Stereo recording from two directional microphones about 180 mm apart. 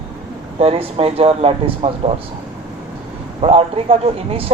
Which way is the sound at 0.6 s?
30° right (ahead or behind).